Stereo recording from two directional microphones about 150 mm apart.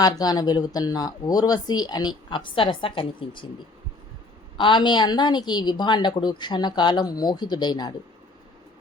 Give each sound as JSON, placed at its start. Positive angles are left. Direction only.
{"t": 0.0, "sound": "speech", "side_deg": 25}
{"t": 4.5, "sound": "speech", "side_deg": 30}